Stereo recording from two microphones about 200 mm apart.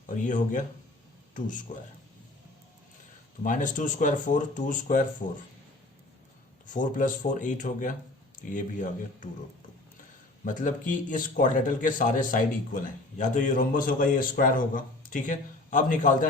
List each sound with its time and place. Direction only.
0.3 s a man's voice: 40° left (ahead or behind)
3.4 s a man's voice: 40° left (ahead or behind)
6.7 s a man's voice: 40° left (ahead or behind)
10.4 s a man's voice: 40° left (ahead or behind)